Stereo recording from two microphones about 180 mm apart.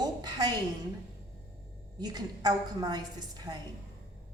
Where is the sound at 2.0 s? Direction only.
20° right (ahead or behind).